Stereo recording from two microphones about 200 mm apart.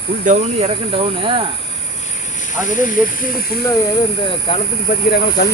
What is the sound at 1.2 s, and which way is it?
Cricket, 25° right (ahead or behind).